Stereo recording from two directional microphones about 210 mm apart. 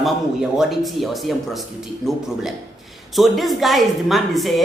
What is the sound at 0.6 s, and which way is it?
A woman's voice, centre (ahead or behind).